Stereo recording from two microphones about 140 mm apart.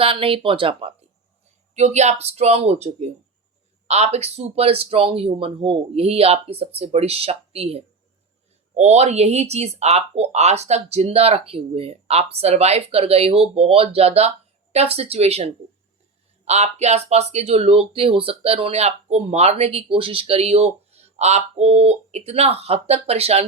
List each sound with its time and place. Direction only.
0.0 s speech: 40° right (ahead or behind)
1.7 s speech: 55° right (ahead or behind)